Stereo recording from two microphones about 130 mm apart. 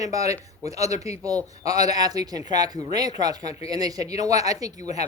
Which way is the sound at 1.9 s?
30° right (ahead or behind).